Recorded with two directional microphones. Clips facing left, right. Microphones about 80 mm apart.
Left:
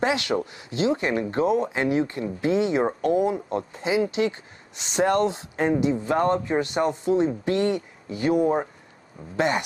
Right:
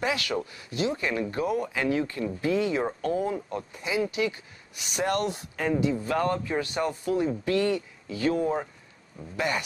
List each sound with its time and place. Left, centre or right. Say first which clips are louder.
0.0 s speech: left 5 dB; left
9.2 s speech: left 1 dB; left